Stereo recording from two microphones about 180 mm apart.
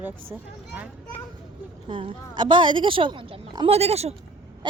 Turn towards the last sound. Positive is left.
turn(degrees=-35)  # may be behind; listen again after turning